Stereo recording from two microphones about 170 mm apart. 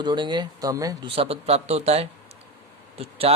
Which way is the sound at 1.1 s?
35° right (ahead or behind).